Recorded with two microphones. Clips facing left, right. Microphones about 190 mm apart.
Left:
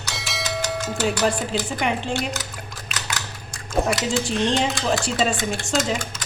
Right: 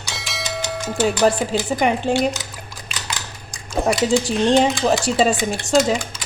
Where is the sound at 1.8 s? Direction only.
45° right (ahead or behind).